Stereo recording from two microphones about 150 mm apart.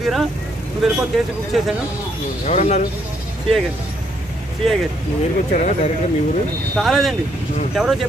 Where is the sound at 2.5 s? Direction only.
45° left (ahead or behind).